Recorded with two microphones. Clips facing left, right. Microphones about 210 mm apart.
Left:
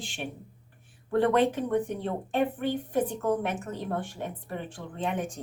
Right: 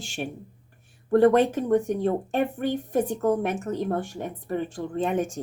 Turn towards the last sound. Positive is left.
turn(degrees=-45)  # may be behind; listen again after turning